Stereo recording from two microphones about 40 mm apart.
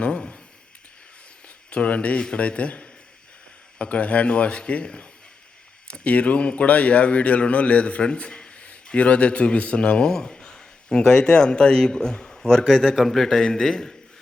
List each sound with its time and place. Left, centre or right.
0.0 s a sound: left
1.7 s a man's voice: left
10.1 s a man's voice: centre